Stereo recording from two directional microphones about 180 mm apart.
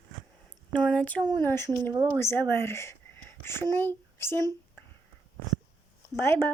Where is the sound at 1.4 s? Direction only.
10° left (ahead or behind).